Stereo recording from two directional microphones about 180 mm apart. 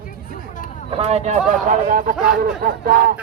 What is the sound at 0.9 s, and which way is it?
Speech, 35° right (ahead or behind).